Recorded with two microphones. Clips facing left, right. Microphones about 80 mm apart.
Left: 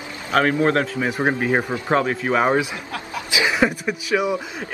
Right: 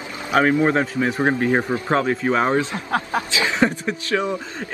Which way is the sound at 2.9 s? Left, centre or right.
Right.